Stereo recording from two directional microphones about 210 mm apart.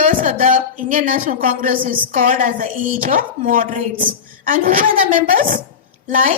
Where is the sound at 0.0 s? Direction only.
40° right (ahead or behind).